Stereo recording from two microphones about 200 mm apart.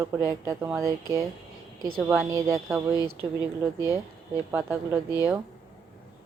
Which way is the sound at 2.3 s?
15° right (ahead or behind).